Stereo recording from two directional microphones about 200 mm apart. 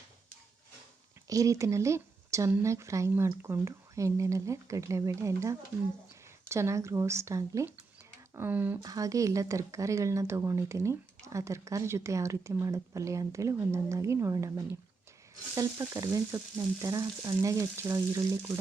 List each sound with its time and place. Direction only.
1.3 s a woman's voice: 15° right (ahead or behind)